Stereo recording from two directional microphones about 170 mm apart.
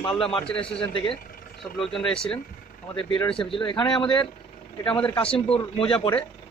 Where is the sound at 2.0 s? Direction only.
30° left (ahead or behind).